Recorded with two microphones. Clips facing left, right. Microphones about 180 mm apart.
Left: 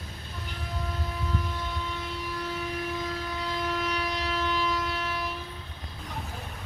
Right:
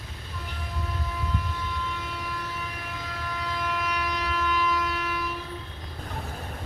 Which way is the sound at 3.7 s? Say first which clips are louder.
Right 1 dB; 35° left (ahead or behind).